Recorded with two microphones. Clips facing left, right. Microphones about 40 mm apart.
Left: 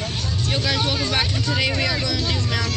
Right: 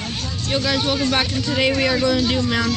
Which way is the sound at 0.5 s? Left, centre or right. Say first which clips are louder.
Right 4 dB; centre.